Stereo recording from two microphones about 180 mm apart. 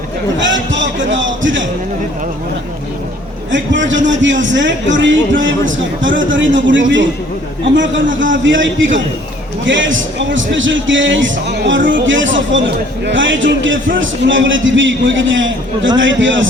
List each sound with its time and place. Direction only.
0.3 s a sound: 90° right
3.5 s speech: 90° right
12.0 s speech: 90° right